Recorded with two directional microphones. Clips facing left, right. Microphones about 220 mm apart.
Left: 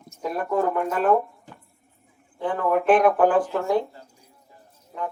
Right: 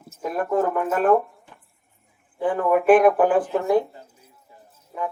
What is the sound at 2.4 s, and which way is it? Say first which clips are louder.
Speech: right 3 dB; 10° right (ahead or behind).